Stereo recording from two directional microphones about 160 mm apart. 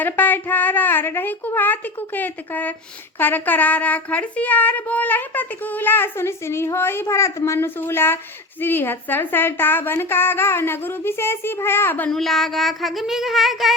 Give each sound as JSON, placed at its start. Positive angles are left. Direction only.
{"t": 0.0, "sound": "a woman's voice", "side_deg": 10}